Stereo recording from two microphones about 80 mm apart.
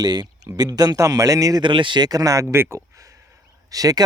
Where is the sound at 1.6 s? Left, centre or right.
Right.